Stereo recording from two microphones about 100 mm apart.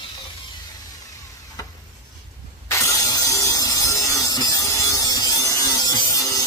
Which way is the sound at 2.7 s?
30° left (ahead or behind).